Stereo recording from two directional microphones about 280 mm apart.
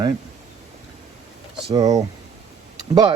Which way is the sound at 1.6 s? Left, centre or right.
Centre.